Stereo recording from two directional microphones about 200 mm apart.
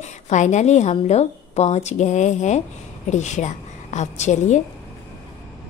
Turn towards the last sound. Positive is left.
turn(degrees=35)  # may be behind; listen again after turning